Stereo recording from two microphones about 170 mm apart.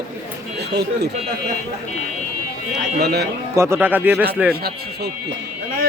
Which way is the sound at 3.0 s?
75° right (ahead or behind).